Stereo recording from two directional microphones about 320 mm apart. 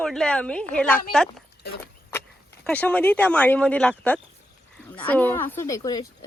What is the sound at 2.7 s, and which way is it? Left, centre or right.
A woman's voice, centre.